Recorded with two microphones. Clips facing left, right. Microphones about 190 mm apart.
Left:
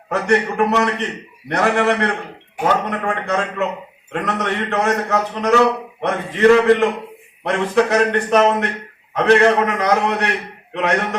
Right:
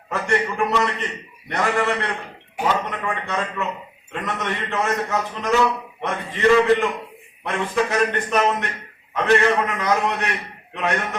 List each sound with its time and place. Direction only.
0.3 s a man's voice: 70° left (ahead or behind)
2.9 s a man's voice: 60° left (ahead or behind)